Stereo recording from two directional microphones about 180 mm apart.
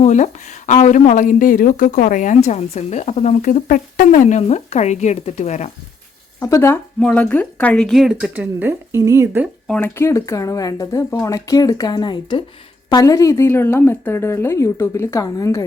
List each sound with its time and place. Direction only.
0.0 s speech: 40° left (ahead or behind)
6.4 s speech: 15° left (ahead or behind); by 9.5 s 15° right (ahead or behind)
9.6 s a woman's voice: 5° left (ahead or behind)